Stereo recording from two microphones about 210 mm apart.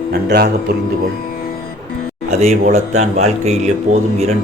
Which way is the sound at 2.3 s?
30° right (ahead or behind).